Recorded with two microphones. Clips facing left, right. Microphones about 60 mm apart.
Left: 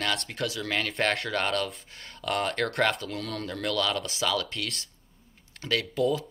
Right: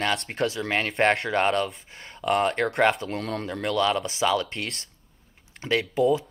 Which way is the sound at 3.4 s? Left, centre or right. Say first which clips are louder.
Right 4 dB; centre.